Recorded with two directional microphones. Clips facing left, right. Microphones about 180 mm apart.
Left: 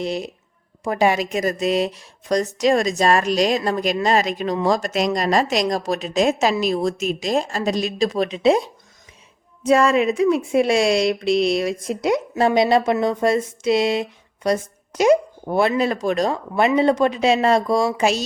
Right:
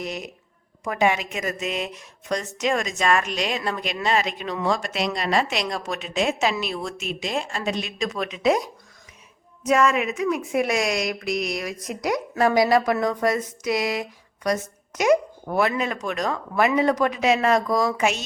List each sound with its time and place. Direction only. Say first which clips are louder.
0.0 s a woman's voice: left 6 dB; 30° left (ahead or behind)